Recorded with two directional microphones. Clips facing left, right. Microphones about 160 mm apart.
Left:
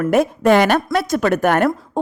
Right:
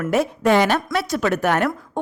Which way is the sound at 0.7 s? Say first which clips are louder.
Left 4 dB; 45° left (ahead or behind).